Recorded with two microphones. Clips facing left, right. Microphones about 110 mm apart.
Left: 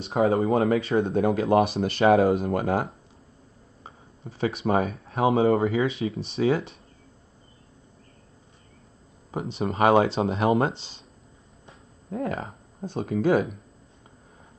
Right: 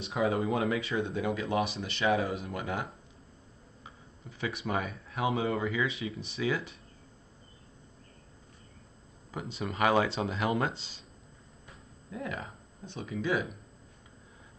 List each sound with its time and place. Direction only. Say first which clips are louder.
0.0 s speech: left 7 dB; 30° left (ahead or behind)
1.1 s speech: left 11 dB; 45° left (ahead or behind)
2.1 s speech: left 11 dB; 35° left (ahead or behind)
3.8 s speech: left 8 dB; 35° left (ahead or behind)
9.3 s speech: left 8 dB; 30° left (ahead or behind)
12.1 s speech: left 8 dB; 45° left (ahead or behind)
12.9 s speech: left 9 dB; 55° left (ahead or behind)